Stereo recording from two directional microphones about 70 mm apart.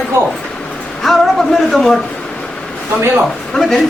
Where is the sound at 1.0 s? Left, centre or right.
Centre.